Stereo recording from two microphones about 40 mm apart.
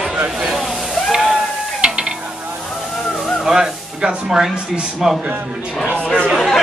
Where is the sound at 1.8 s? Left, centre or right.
Right.